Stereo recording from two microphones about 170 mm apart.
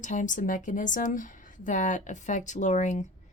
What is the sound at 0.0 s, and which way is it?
Speech, 45° left (ahead or behind).